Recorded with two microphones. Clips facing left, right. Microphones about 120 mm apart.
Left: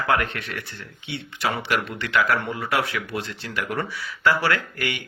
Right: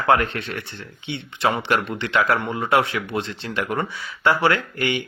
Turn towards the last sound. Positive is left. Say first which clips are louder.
# right 4 dB
turn(degrees=-25)  # may be behind; listen again after turning